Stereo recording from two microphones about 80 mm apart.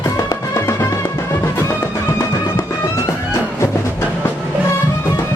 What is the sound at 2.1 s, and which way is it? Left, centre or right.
Music, left.